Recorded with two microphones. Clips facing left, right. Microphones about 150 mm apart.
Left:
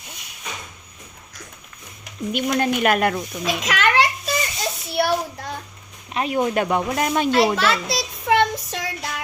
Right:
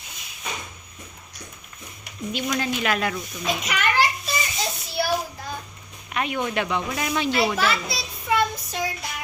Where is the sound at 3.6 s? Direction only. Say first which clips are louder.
Left 4 dB; 90° left.